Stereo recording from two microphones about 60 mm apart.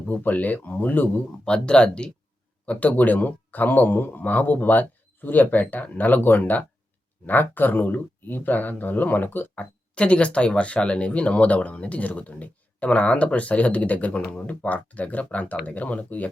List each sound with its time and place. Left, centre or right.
0.1 s speech: left
1.5 s speech: centre
2.6 s speech: left